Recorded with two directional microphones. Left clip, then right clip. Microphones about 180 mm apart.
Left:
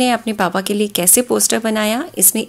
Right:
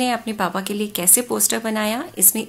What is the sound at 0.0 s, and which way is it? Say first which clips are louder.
Speech: left 5 dB; 30° left (ahead or behind).